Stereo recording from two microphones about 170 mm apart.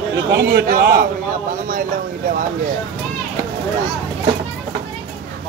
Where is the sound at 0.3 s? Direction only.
60° right (ahead or behind).